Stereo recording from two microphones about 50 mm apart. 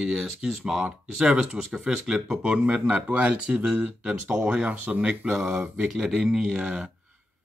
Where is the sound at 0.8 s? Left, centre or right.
Centre.